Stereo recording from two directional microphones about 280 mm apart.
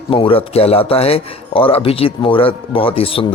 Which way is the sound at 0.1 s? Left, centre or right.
Centre.